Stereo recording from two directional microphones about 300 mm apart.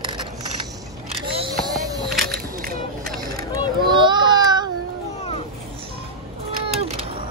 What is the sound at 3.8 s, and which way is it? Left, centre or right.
Baby cry, centre.